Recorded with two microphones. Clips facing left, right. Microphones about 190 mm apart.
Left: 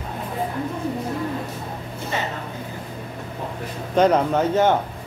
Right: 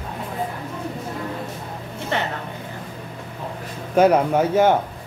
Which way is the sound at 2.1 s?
65° right (ahead or behind).